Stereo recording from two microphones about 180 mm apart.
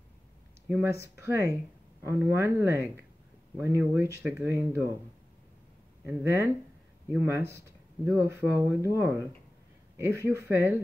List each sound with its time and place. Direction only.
0.7 s speech: 10° right (ahead or behind)
6.0 s speech: 10° right (ahead or behind)